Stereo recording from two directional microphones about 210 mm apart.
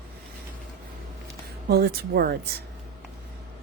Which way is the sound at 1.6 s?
50° right (ahead or behind).